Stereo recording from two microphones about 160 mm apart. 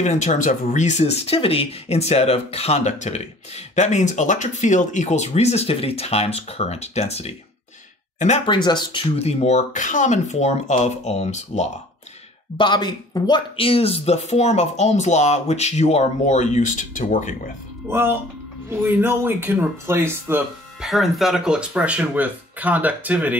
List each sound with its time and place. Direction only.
0.0 s speech: 45° left (ahead or behind)
8.5 s speech: 30° left (ahead or behind); by 11.7 s 45° left (ahead or behind)
12.5 s speech: 30° left (ahead or behind); by 17.4 s 50° left (ahead or behind)
17.8 s speech: 15° right (ahead or behind)
20.8 s speech: centre (ahead or behind)